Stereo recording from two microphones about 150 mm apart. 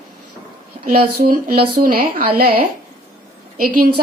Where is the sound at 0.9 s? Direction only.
80° right.